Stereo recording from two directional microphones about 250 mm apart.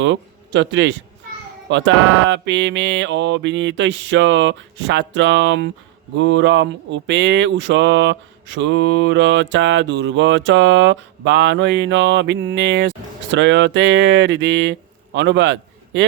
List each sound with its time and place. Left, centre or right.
0.0 s a man's voice: right
1.7 s mantra: right